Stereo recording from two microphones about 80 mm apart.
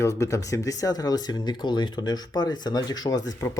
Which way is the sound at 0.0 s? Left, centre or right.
Left.